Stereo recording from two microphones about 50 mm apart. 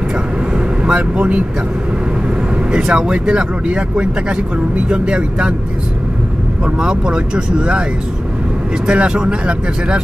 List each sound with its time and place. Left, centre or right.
0.8 s speech: right
2.7 s speech: centre
6.6 s speech: centre
8.8 s speech: right